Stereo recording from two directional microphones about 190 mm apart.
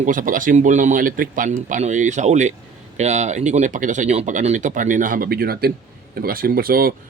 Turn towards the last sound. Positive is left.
turn(degrees=-50)  # may be behind; listen again after turning